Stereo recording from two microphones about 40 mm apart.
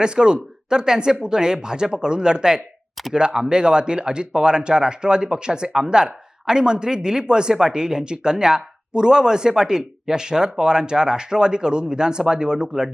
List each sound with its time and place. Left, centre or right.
0.0 s speech: centre